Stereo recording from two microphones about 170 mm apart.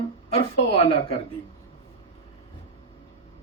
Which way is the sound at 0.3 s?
35° left (ahead or behind).